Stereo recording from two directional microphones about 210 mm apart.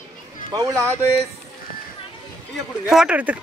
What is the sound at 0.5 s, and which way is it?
Speech, 15° right (ahead or behind).